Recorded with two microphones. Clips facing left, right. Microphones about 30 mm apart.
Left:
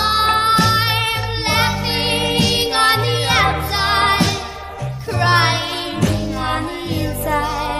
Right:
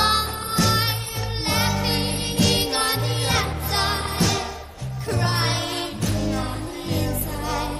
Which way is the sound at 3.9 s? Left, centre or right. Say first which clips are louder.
Left 8 dB; left.